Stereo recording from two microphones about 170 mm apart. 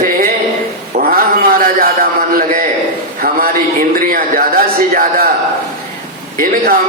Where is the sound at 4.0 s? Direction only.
55° right (ahead or behind).